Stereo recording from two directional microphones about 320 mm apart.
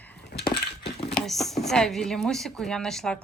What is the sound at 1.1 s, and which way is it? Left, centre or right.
Speech, centre.